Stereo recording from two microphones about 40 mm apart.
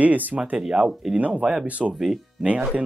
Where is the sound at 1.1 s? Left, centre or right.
Right.